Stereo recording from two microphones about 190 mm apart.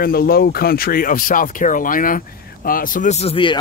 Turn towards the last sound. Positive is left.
turn(degrees=30)  # may be behind; listen again after turning